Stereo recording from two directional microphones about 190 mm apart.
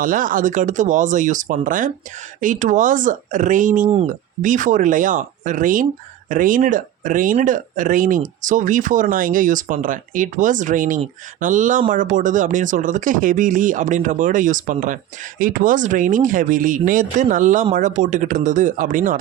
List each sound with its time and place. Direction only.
0.0 s speech: 45° right (ahead or behind)